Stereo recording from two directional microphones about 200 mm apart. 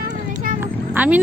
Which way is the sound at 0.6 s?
10° right (ahead or behind).